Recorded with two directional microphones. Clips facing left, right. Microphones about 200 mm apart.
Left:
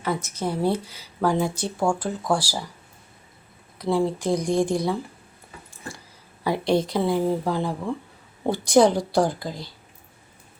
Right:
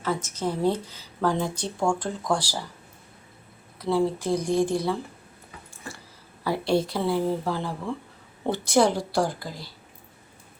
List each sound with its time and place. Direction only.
0.0 s speech: 10° left (ahead or behind)
3.8 s speech: 15° left (ahead or behind)
6.4 s speech: 15° left (ahead or behind)